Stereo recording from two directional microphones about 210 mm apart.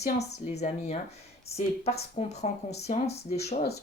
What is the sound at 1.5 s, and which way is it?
Speech, 30° left (ahead or behind).